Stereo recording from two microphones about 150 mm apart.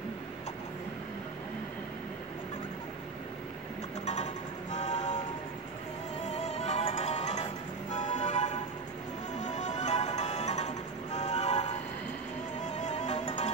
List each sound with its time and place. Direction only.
4.1 s music: 50° left (ahead or behind)
6.2 s music: 45° left (ahead or behind)
12.6 s music: 50° left (ahead or behind)